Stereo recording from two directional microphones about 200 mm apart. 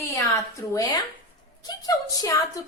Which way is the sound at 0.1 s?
15° left (ahead or behind).